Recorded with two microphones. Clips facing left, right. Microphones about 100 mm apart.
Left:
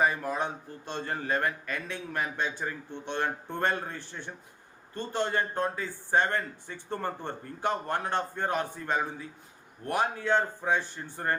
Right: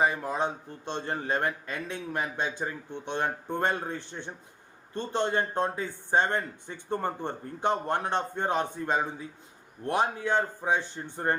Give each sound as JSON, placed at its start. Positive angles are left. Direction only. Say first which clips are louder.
{"t": 0.0, "sound": "a man's voice", "louder": "right 1 dB", "side_deg": -20}